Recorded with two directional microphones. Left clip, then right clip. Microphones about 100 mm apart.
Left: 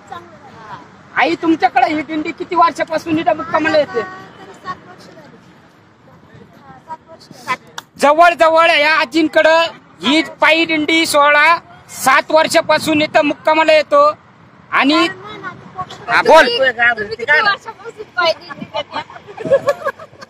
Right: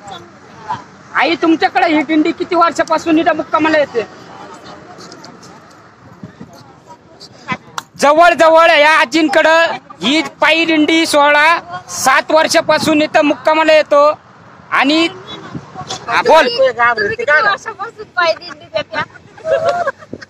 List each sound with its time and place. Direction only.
0.7 s a man's voice: 30° right (ahead or behind)
7.4 s a man's voice: 30° right (ahead or behind)
14.7 s a sound: 30° right (ahead or behind)
16.1 s speech: 5° left (ahead or behind)